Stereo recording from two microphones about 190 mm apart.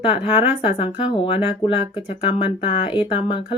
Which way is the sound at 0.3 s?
30° left (ahead or behind).